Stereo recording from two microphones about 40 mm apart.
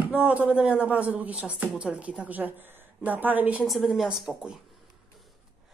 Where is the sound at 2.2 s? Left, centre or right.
Right.